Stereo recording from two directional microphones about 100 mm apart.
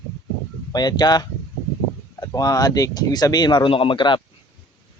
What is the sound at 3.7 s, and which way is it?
Speech, 60° left (ahead or behind).